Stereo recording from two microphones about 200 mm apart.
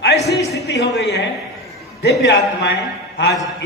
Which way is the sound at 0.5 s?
60° left (ahead or behind).